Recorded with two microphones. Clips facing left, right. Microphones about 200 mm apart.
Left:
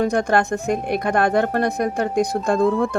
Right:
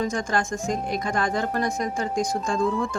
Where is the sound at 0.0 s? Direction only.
60° left (ahead or behind).